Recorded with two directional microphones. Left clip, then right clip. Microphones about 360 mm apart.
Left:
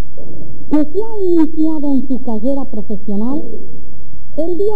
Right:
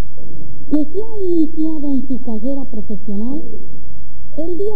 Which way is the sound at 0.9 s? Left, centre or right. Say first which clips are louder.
Left 4 dB; right.